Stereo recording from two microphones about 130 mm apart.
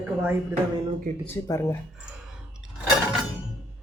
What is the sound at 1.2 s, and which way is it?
Speech, 20° left (ahead or behind).